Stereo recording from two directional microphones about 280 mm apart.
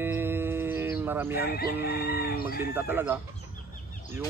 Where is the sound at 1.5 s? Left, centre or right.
Left.